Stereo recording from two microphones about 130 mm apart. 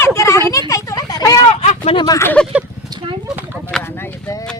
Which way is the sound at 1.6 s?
55° left (ahead or behind).